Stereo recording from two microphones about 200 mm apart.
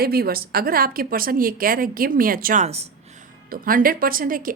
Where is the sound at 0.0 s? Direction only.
50° right (ahead or behind); by 2.9 s 30° right (ahead or behind).